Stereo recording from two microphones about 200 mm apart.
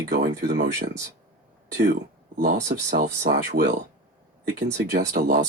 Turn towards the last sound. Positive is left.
turn(degrees=-45)  # may be behind; listen again after turning